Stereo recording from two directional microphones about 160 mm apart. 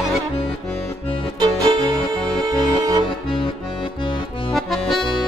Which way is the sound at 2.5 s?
25° right (ahead or behind).